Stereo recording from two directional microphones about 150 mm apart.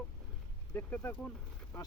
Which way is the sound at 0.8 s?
10° left (ahead or behind).